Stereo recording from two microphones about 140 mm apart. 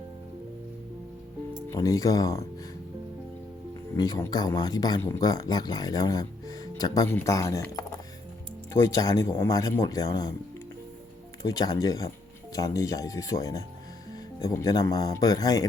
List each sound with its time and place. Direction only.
1.7 s speech: 25° left (ahead or behind)
3.9 s speech: 25° left (ahead or behind)
11.4 s speech: 25° left (ahead or behind)